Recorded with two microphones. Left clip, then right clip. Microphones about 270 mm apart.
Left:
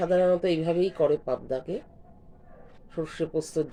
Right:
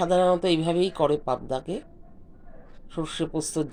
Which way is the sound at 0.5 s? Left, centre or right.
Right.